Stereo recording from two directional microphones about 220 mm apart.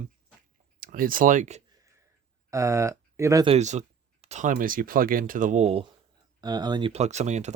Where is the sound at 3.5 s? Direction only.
30° right (ahead or behind).